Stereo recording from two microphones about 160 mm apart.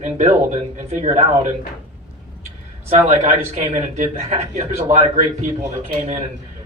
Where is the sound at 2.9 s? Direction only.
45° right (ahead or behind).